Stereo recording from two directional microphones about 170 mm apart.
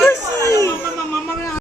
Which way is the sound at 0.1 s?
20° left (ahead or behind).